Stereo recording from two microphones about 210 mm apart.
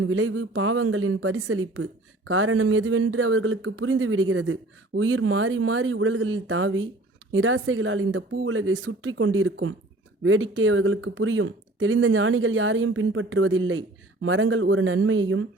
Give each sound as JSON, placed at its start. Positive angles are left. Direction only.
{"t": 0.0, "sound": "speech", "side_deg": -75}